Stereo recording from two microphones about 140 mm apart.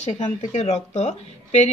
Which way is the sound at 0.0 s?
55° left (ahead or behind).